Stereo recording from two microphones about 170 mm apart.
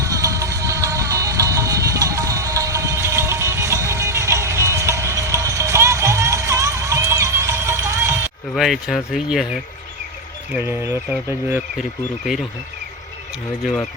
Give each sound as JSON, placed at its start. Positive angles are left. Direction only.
{"t": 0.0, "sound": "music", "side_deg": -20}
{"t": 8.5, "sound": "speech", "side_deg": 0}
{"t": 10.5, "sound": "speech", "side_deg": -15}